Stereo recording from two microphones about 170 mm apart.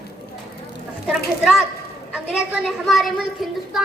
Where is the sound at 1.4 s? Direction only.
5° right (ahead or behind).